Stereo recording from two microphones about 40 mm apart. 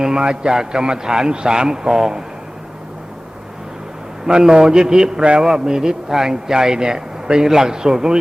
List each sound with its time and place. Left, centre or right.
0.0 s speech: right
4.3 s speech: centre